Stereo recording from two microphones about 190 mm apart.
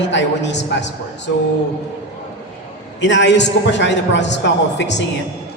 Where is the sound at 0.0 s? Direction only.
70° left (ahead or behind).